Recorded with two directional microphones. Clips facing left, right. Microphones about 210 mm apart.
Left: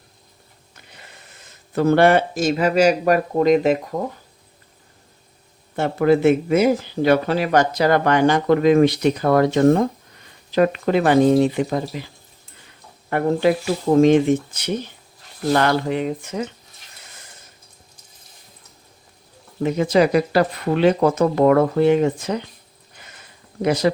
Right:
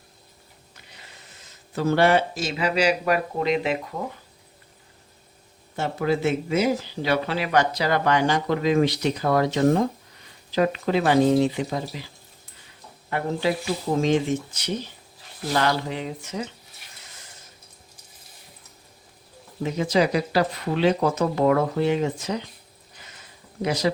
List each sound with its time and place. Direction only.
1.7 s speech: 55° left (ahead or behind)
5.7 s speech: 55° left (ahead or behind)
13.1 s speech: 55° left (ahead or behind)
19.6 s speech: 55° left (ahead or behind)
23.6 s speech: 55° left (ahead or behind)